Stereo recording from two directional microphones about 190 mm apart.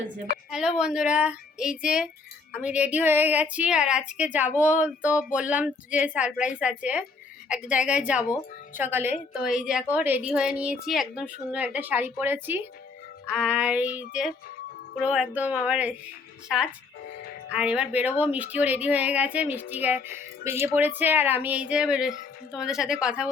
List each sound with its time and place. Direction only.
0.5 s speech: 5° right (ahead or behind)
17.1 s music: 50° left (ahead or behind)
17.5 s speech: 5° right (ahead or behind)